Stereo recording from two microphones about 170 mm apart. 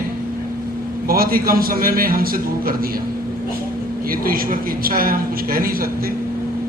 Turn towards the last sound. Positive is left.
turn(degrees=-60)  # may be behind; listen again after turning